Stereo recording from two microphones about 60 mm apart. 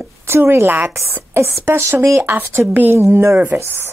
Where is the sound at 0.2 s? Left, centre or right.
Right.